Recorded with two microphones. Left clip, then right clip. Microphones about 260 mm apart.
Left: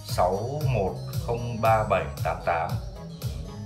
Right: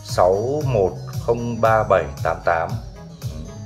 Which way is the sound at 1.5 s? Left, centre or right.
Centre.